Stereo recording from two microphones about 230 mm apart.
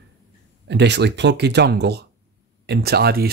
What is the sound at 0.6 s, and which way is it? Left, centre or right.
Speech, right.